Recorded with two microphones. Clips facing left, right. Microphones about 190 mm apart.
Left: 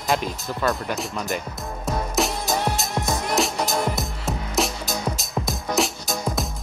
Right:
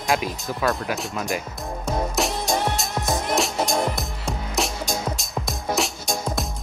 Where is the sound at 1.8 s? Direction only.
Centre (ahead or behind).